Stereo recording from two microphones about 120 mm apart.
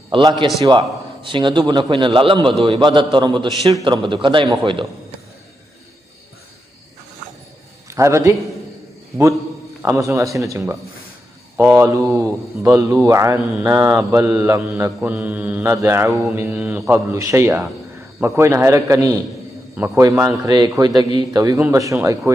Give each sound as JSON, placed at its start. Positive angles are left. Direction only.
{"t": 0.1, "sound": "a man's voice", "side_deg": -45}
{"t": 7.9, "sound": "speech", "side_deg": -25}
{"t": 9.8, "sound": "speech", "side_deg": -25}
{"t": 15.0, "sound": "mantra", "side_deg": -15}
{"t": 16.5, "sound": "a man's voice", "side_deg": -10}